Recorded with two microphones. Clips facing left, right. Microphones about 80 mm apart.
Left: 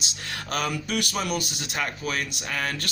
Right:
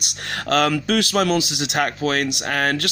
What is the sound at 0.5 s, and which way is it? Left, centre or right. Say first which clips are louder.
Speech: right 9 dB; right.